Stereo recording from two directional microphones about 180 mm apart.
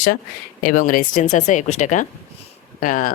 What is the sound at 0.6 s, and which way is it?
Speech, 50° left (ahead or behind).